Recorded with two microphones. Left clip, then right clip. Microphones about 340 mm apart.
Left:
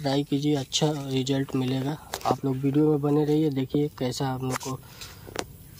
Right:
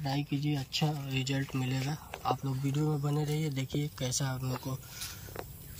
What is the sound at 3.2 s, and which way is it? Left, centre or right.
Speech, centre.